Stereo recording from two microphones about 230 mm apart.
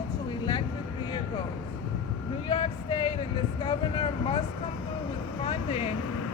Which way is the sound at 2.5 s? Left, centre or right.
Left.